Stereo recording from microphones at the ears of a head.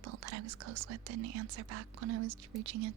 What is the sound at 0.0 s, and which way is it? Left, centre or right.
Speech, right.